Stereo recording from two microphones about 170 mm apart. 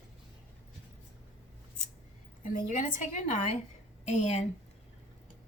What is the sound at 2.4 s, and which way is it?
A woman's voice, 50° left (ahead or behind).